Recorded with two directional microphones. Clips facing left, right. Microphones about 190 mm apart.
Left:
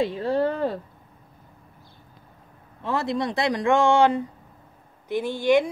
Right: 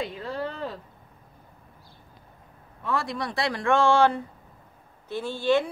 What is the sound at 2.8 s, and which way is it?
A man's voice, 25° left (ahead or behind).